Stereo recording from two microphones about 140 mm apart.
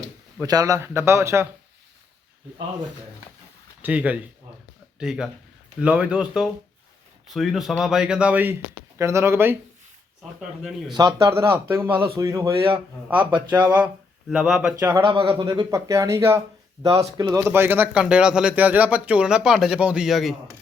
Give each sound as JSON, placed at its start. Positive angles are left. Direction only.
{"t": 0.4, "sound": "a man's voice", "side_deg": -25}
{"t": 3.8, "sound": "a man's voice", "side_deg": -10}
{"t": 10.6, "sound": "speech", "side_deg": 0}
{"t": 10.9, "sound": "a man's voice", "side_deg": -30}
{"t": 13.1, "sound": "speech", "side_deg": -10}
{"t": 14.8, "sound": "speech", "side_deg": -15}
{"t": 15.0, "sound": "a man's voice", "side_deg": -35}
{"t": 17.4, "sound": "speech", "side_deg": -15}